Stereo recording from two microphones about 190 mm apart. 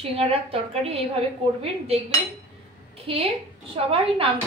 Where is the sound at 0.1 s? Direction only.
30° right (ahead or behind).